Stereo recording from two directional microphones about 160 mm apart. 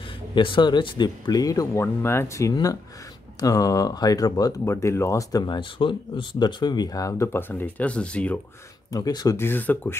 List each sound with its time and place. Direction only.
0.3 s speech: 30° left (ahead or behind); by 8.4 s 10° left (ahead or behind)
8.9 s speech: 25° left (ahead or behind)